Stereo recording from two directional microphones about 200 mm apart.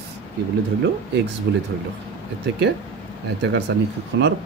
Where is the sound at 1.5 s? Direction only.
55° right (ahead or behind).